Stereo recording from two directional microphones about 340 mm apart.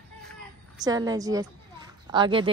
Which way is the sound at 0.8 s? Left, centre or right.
Centre.